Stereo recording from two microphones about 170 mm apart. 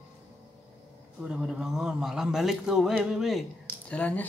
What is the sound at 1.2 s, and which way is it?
A man's voice, 5° right (ahead or behind).